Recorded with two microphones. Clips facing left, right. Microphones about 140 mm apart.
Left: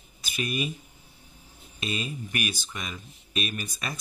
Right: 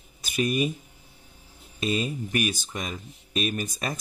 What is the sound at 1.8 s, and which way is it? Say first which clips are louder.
Speech: right 6 dB; 40° right (ahead or behind).